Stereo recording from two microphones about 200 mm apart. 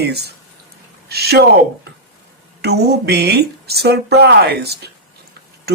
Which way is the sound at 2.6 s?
55° right (ahead or behind).